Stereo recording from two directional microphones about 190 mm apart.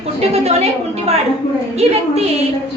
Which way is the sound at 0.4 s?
30° right (ahead or behind).